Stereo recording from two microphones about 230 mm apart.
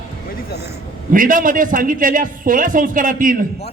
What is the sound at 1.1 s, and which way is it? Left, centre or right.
A man's voice, right.